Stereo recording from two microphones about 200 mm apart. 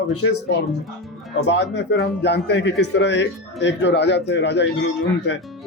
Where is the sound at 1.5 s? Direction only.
55° left (ahead or behind).